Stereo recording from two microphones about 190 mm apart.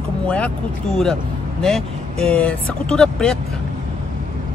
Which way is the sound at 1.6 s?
Centre (ahead or behind).